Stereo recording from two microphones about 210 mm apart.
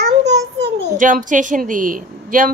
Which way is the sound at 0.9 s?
40° right (ahead or behind).